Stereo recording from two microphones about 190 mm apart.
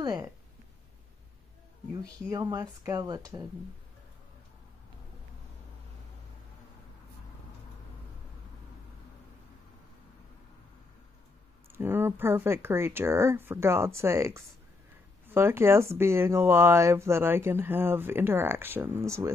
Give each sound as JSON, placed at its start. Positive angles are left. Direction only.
{"t": 0.0, "sound": "speech", "side_deg": -20}
{"t": 2.0, "sound": "speech", "side_deg": -20}
{"t": 11.6, "sound": "speech", "side_deg": -10}